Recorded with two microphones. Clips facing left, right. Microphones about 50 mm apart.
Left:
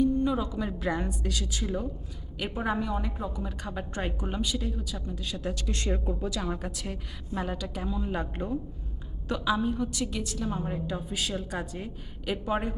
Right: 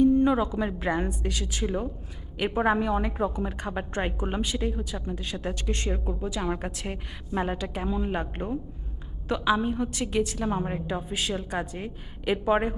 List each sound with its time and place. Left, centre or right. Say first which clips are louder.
0.0 s a sound: right 5 dB; right
0.8 s a woman's voice: right 3 dB; right
5.9 s a woman's voice: even; centre
6.2 s a woman's voice: right 2 dB; right
9.6 s a woman's voice: right 1 dB; right